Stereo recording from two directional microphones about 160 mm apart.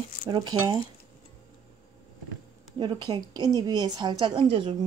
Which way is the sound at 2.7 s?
25° right (ahead or behind).